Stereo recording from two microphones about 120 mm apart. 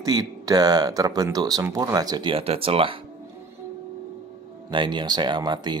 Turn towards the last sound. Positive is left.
turn(degrees=-40)  # may be behind; listen again after turning